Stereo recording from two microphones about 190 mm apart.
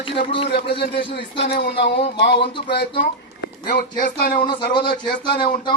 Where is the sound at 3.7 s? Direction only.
45° left (ahead or behind).